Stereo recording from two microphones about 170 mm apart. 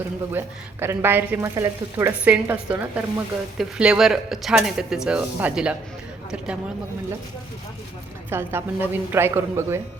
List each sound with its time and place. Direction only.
0.3 s speech: 15° right (ahead or behind)
8.3 s speech: 15° right (ahead or behind)